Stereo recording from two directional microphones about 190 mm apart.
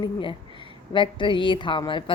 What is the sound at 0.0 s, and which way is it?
A woman's voice, 25° left (ahead or behind).